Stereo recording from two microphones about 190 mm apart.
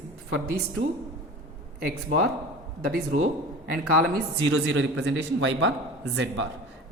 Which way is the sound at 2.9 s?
50° right (ahead or behind).